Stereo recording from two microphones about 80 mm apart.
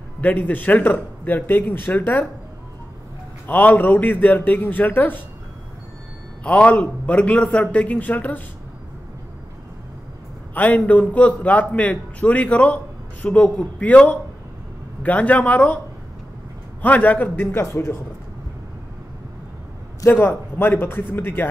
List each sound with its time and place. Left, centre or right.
0.2 s a man's voice: left
3.4 s a man's voice: left
6.4 s a man's voice: centre
10.5 s a man's voice: centre
16.8 s a man's voice: centre
20.1 s a man's voice: left